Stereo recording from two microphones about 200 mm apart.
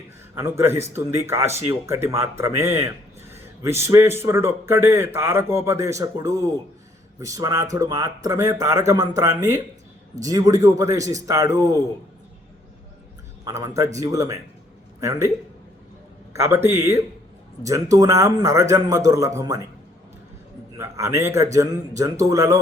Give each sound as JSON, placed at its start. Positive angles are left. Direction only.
{"t": 0.3, "sound": "speech", "side_deg": -15}
{"t": 13.4, "sound": "speech", "side_deg": -15}
{"t": 16.4, "sound": "speech", "side_deg": -10}
{"t": 20.7, "sound": "speech", "side_deg": -15}